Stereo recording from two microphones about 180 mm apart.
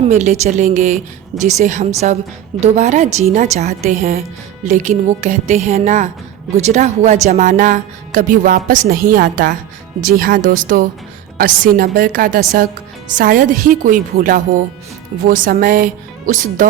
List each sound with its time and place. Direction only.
0.0 s a woman's voice: 40° right (ahead or behind)